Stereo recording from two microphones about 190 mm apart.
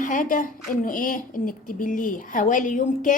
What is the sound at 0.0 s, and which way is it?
A woman's voice, 45° left (ahead or behind).